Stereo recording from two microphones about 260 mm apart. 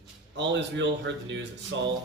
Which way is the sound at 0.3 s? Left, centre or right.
Right.